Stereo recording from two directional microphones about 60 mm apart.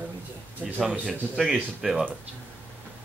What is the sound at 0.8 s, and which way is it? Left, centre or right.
Speech, centre.